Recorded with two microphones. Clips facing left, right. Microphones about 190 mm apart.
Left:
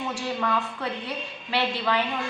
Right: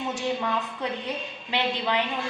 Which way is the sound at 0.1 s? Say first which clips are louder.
Even; 20° right (ahead or behind).